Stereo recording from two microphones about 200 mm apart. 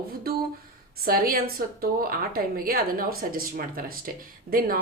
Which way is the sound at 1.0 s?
50° right (ahead or behind).